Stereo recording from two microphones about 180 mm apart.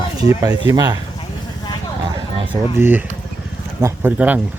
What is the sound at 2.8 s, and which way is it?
Speech, 10° right (ahead or behind).